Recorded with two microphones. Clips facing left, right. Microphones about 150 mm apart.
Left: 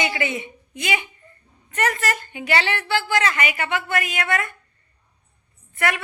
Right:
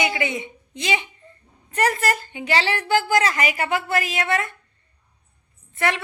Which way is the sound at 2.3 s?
25° right (ahead or behind).